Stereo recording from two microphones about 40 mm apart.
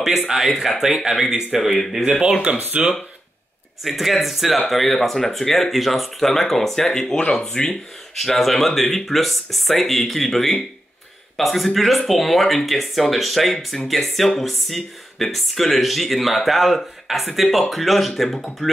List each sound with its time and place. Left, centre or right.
0.5 s speech: centre
2.0 s speech: right
2.5 s speech: right
3.8 s speech: centre
8.2 s speech: centre